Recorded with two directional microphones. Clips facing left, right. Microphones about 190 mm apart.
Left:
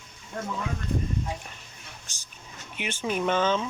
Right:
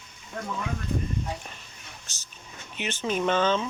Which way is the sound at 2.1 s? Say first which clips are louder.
Even; 10° left (ahead or behind).